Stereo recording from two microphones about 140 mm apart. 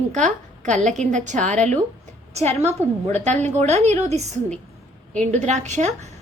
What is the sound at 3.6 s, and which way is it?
A woman's voice, 55° right (ahead or behind).